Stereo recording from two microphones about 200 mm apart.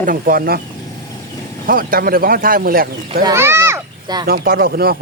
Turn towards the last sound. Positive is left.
turn(degrees=-50)  # may be behind; listen again after turning